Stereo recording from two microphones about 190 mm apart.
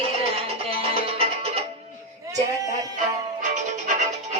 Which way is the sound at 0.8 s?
30° right (ahead or behind).